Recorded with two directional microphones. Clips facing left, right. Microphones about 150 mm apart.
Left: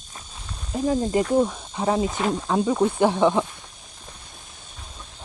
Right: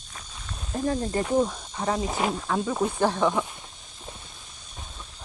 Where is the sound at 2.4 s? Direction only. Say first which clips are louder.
Left 5 dB; 20° left (ahead or behind).